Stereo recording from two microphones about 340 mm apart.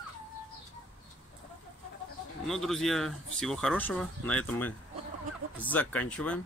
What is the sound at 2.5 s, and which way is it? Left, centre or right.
Speech, centre.